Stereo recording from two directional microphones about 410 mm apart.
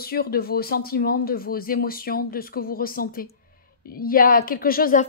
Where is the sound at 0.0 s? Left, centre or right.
Left.